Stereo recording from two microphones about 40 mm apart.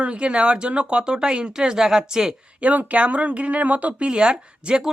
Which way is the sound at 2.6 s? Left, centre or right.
Right.